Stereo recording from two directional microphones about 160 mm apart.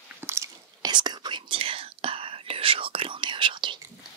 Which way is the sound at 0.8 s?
25° right (ahead or behind).